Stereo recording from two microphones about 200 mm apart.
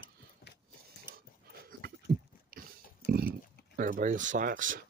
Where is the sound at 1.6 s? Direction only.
50° right (ahead or behind).